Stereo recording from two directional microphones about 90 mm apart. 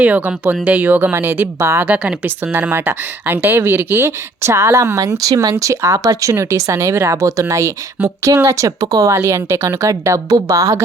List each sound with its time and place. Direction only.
0.0 s speech: 15° right (ahead or behind)
1.9 s speech: 20° right (ahead or behind); by 10.8 s 40° right (ahead or behind)